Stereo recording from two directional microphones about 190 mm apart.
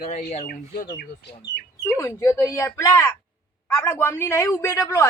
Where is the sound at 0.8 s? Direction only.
60° left (ahead or behind).